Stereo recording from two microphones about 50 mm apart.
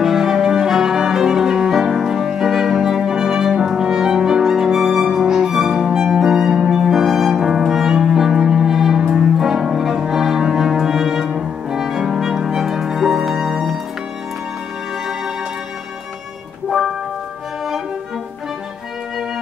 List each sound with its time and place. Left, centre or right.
0.0 s music: centre
9.0 s music: right
9.4 s music: centre
16.6 s music: centre